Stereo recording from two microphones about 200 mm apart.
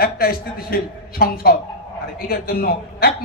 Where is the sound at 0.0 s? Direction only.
50° left (ahead or behind).